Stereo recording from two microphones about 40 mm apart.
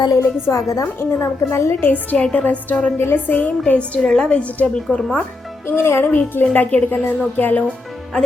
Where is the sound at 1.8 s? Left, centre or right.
Left.